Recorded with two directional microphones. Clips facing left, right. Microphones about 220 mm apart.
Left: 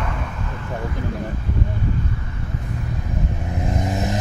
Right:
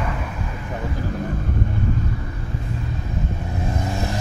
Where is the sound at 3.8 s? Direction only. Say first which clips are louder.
Left 2 dB; 20° left (ahead or behind).